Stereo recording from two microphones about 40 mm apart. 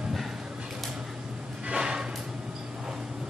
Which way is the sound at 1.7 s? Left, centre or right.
Right.